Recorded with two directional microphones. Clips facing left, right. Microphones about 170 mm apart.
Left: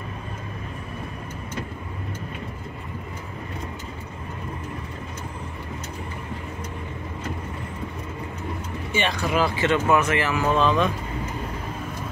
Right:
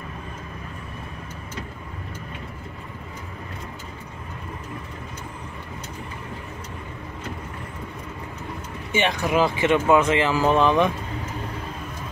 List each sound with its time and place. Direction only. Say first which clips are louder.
8.9 s speech: right 2 dB; 15° right (ahead or behind)